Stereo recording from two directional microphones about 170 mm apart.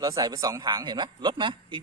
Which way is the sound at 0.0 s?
25° right (ahead or behind).